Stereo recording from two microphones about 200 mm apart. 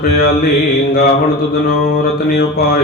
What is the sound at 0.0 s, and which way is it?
Mantra, 50° left (ahead or behind).